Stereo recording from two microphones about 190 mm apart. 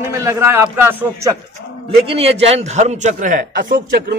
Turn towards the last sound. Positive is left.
turn(degrees=-60)  # may be behind; listen again after turning